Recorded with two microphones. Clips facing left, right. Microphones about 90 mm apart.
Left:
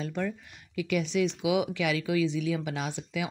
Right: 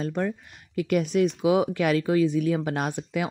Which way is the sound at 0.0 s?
40° right (ahead or behind).